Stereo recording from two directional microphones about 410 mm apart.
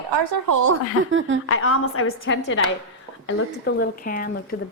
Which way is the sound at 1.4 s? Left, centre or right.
Left.